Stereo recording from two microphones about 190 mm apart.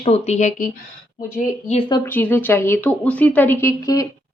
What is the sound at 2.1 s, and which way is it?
Speech, 10° left (ahead or behind).